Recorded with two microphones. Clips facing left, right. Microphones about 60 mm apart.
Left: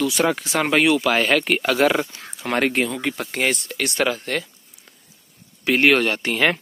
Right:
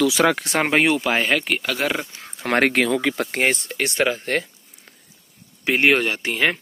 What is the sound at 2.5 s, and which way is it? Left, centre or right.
Speech, right.